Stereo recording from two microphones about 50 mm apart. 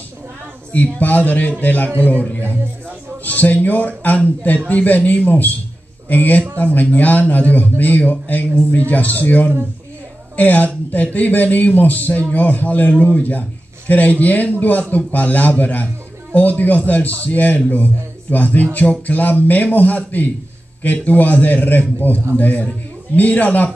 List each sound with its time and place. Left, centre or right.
0.7 s a man's voice: left
3.3 s a man's voice: left